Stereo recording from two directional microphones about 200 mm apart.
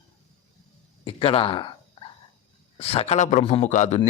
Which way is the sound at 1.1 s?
25° left (ahead or behind).